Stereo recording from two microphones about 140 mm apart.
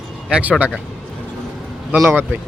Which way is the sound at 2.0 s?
15° right (ahead or behind).